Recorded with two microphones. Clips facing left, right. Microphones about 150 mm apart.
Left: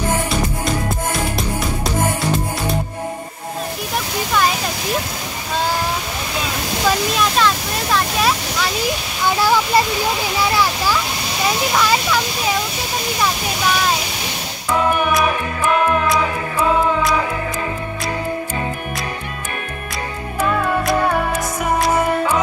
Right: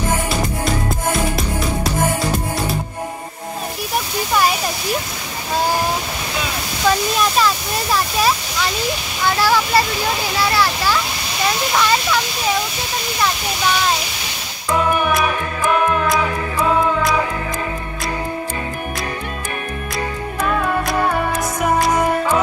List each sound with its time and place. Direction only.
6.9 s speech: 5° right (ahead or behind)
9.3 s speech: 15° left (ahead or behind)
11.7 s speech: 5° left (ahead or behind)
16.1 s music: centre (ahead or behind)